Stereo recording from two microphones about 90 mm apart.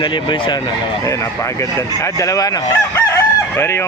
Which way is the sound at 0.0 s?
60° left (ahead or behind).